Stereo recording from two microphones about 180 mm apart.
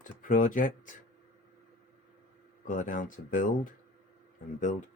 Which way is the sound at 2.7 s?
45° left (ahead or behind).